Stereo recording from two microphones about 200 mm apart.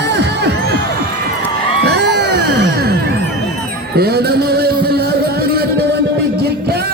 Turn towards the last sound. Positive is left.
turn(degrees=-50)  # may be behind; listen again after turning